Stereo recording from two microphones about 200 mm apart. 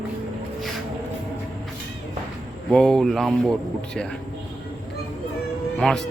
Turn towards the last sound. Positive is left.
turn(degrees=5)  # may be behind; listen again after turning